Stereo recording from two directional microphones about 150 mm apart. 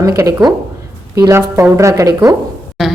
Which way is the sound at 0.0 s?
20° right (ahead or behind).